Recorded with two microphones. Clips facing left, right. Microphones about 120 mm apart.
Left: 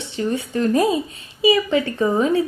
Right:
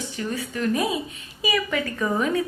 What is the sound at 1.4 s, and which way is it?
A woman's voice, 25° left (ahead or behind).